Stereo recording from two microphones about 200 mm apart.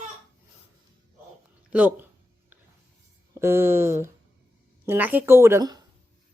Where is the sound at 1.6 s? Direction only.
5° right (ahead or behind).